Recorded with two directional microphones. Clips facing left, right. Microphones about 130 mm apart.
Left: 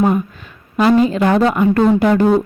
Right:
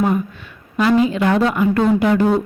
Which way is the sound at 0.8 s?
40° left (ahead or behind).